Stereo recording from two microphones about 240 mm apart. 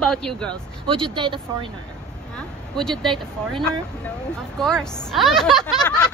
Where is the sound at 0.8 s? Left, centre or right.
Right.